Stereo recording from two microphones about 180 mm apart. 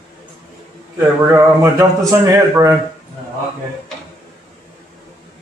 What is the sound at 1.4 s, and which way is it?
A man's voice, 15° right (ahead or behind).